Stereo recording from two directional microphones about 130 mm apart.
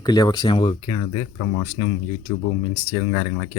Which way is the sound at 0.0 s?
30° left (ahead or behind).